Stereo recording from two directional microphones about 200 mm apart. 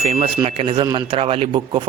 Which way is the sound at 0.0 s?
30° right (ahead or behind).